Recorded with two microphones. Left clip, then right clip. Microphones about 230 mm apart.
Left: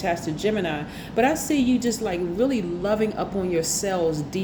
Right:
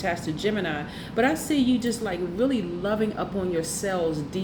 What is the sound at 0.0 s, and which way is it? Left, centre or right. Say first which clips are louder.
A woman's voice: left 2 dB; left.